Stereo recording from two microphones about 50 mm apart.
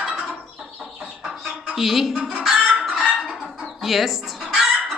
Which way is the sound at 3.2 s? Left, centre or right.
Centre.